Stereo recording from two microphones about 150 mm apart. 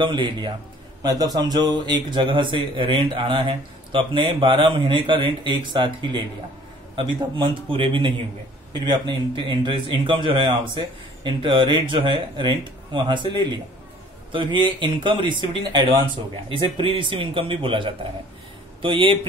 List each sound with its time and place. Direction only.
0.0 s a man's voice: 30° right (ahead or behind)